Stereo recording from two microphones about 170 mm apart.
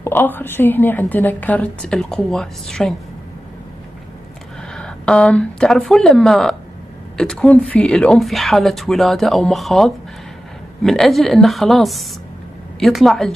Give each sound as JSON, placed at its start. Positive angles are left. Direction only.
{"t": 0.0, "sound": "a woman's voice", "side_deg": 10}
{"t": 4.7, "sound": "speech", "side_deg": 5}